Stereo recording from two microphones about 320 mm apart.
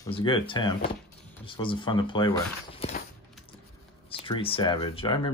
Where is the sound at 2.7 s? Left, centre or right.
Left.